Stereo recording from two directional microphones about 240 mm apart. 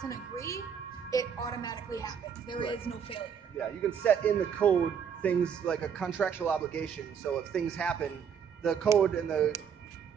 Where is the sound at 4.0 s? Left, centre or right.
Centre.